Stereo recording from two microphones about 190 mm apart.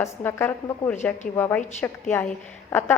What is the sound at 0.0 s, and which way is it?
A woman's voice, 10° left (ahead or behind).